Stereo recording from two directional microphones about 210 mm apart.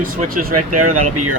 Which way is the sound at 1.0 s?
90° right.